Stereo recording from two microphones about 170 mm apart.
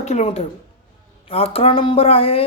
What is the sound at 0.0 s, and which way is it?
A woman's voice, 40° left (ahead or behind).